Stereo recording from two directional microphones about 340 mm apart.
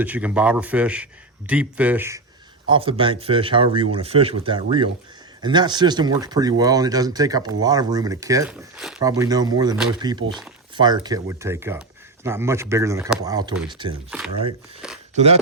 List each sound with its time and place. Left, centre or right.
0.0 s speech: centre
15.1 s speech: centre